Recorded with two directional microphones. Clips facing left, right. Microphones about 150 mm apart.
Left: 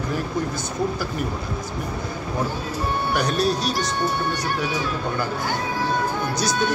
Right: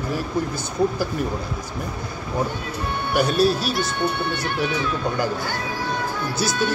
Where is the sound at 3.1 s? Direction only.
5° right (ahead or behind).